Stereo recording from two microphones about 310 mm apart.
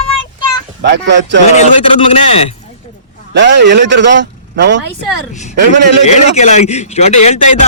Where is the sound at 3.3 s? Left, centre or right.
Right.